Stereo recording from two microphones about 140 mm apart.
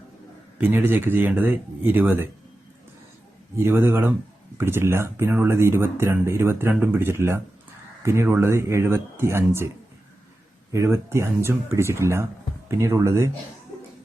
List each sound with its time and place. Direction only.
0.6 s speech: 15° right (ahead or behind)
3.6 s speech: 15° right (ahead or behind)
10.7 s speech: 20° right (ahead or behind)